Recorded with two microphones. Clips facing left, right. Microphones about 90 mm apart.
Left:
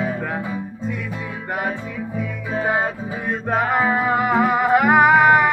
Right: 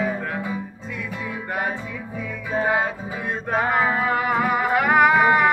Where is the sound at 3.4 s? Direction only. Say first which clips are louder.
Left 2 dB; 20° left (ahead or behind).